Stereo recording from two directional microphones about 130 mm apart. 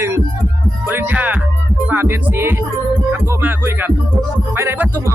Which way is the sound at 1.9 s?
15° right (ahead or behind).